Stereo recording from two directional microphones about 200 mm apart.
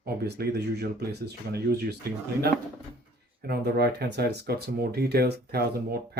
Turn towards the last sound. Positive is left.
turn(degrees=-50)  # may be behind; listen again after turning